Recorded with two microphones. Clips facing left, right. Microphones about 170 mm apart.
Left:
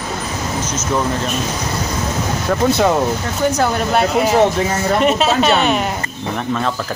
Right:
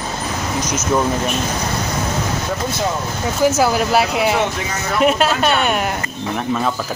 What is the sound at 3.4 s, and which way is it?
Speech, 5° right (ahead or behind).